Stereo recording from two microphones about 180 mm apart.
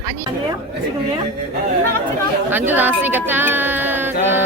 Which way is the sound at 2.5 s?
10° right (ahead or behind).